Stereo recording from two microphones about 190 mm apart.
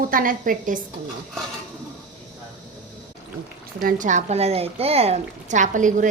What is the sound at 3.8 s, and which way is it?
A woman's voice, 40° right (ahead or behind).